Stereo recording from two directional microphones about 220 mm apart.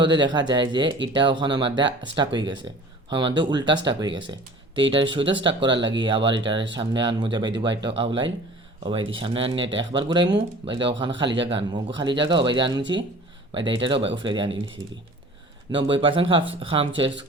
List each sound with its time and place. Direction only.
0.0 s speech: 20° right (ahead or behind)
15.7 s speech: 20° right (ahead or behind)